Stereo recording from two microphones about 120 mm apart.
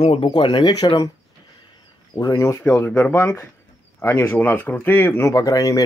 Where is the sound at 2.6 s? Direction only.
15° left (ahead or behind).